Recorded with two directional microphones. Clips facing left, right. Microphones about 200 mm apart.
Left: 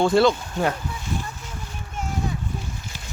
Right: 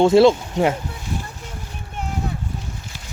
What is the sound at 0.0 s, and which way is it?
Speech, 25° right (ahead or behind).